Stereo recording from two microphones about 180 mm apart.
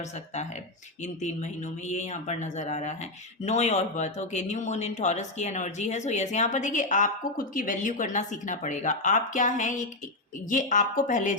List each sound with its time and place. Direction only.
1.0 s speech: 40° left (ahead or behind)